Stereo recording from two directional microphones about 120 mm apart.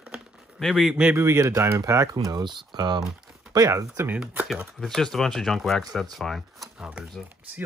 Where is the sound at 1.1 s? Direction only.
25° right (ahead or behind).